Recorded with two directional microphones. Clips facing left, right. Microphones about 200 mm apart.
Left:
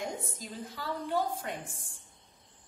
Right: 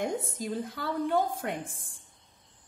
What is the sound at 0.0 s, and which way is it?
A woman's voice, 55° right (ahead or behind).